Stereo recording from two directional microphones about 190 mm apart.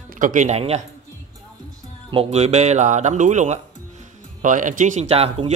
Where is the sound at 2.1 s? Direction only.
30° right (ahead or behind).